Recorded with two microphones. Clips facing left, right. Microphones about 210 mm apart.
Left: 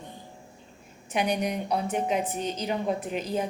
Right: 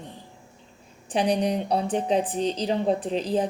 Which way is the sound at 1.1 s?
30° right (ahead or behind).